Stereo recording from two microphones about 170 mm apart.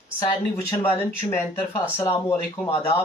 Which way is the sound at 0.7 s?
15° left (ahead or behind).